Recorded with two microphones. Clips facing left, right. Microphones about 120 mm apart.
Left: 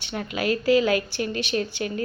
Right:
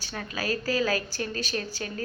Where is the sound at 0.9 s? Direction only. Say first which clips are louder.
Left 5 dB; 35° right (ahead or behind).